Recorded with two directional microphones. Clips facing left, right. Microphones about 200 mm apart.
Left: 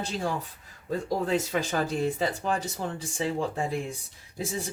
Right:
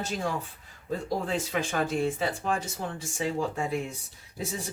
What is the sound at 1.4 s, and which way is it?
Speech, 40° left (ahead or behind).